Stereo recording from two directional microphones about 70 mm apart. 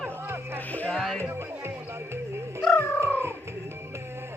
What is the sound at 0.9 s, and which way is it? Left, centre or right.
Music, centre.